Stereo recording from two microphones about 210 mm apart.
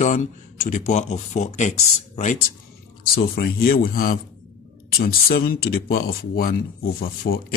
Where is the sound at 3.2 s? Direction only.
45° left (ahead or behind).